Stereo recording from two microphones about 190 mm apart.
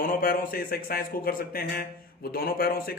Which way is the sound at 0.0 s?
50° left (ahead or behind).